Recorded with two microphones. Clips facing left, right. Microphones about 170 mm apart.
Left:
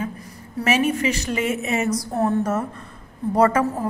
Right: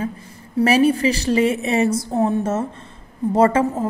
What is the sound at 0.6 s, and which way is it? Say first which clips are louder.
A woman's voice: right 5 dB; 35° right (ahead or behind).